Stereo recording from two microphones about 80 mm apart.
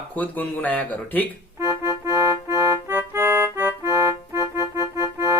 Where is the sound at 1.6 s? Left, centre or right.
Right.